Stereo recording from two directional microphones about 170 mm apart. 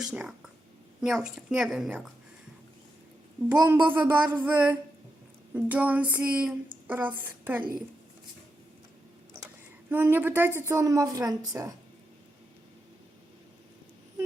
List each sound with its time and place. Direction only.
0.0 s a woman's voice: 5° right (ahead or behind)
3.6 s a woman's voice: 10° right (ahead or behind)
9.9 s a woman's voice: 10° right (ahead or behind)